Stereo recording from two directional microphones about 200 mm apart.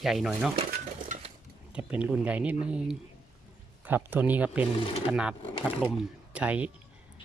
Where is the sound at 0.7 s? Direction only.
40° right (ahead or behind).